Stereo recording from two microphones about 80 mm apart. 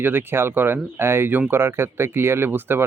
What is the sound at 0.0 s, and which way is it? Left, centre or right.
Speech, right.